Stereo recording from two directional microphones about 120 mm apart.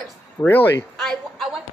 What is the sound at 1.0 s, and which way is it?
Speech, centre (ahead or behind).